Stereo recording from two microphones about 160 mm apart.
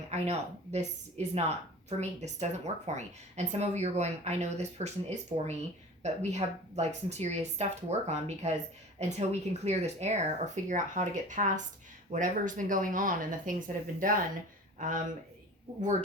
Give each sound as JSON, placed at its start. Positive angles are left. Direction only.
{"t": 0.1, "sound": "speech", "side_deg": -45}
{"t": 14.8, "sound": "speech", "side_deg": -55}